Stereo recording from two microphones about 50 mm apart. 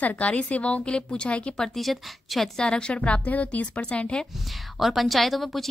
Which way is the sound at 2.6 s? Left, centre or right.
Centre.